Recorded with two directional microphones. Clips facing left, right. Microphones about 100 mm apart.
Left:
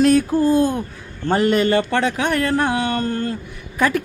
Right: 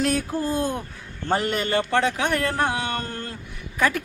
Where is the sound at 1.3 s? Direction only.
70° left (ahead or behind).